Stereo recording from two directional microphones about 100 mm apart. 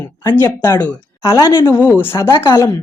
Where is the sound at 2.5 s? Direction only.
40° left (ahead or behind).